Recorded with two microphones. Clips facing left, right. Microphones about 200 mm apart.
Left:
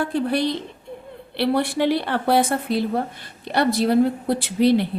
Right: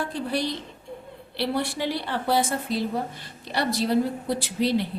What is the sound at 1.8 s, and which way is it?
Speech, 60° left (ahead or behind).